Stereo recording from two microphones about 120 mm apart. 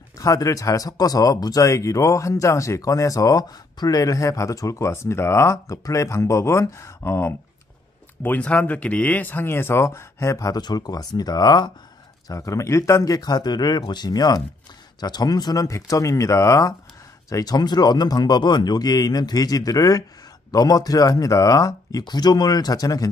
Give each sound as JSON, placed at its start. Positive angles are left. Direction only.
{"t": 0.2, "sound": "speech", "side_deg": 30}
{"t": 12.3, "sound": "speech", "side_deg": 25}